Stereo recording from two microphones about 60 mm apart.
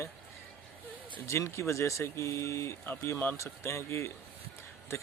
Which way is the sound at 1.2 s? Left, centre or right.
Left.